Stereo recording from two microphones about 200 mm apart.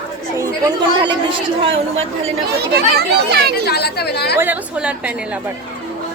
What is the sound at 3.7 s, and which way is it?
Speech, 55° left (ahead or behind).